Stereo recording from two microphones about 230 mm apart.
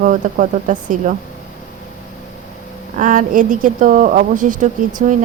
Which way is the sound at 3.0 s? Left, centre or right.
Right.